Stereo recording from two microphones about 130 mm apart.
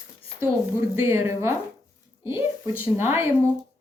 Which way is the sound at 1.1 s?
20° right (ahead or behind).